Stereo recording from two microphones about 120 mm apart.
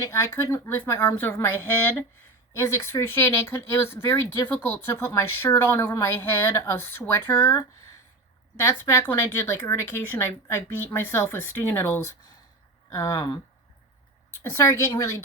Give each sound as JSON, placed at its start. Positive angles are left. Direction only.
{"t": 0.0, "sound": "speech", "side_deg": 25}
{"t": 14.5, "sound": "speech", "side_deg": 25}